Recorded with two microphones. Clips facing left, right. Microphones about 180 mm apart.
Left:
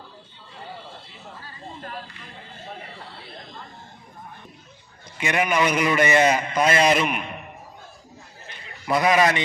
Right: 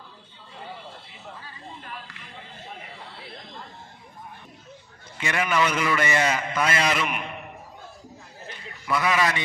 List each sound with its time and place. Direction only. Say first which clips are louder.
1.8 s a sound: left 6 dB; 40° left (ahead or behind)
5.1 s a man's voice: left 3 dB; 20° left (ahead or behind)
9.0 s a man's voice: left 5 dB; 20° left (ahead or behind)